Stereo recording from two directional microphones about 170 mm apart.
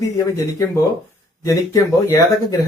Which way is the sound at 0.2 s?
20° left (ahead or behind).